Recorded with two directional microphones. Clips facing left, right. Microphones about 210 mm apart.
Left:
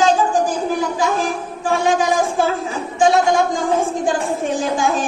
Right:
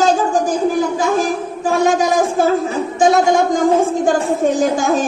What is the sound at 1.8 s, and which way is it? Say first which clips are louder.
Speech: right 3 dB; 45° right (ahead or behind).